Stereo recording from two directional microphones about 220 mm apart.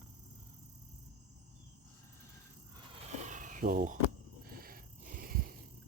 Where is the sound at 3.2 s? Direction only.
35° right (ahead or behind).